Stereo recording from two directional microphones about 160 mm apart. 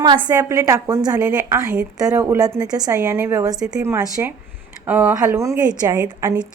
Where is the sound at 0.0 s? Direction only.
25° right (ahead or behind).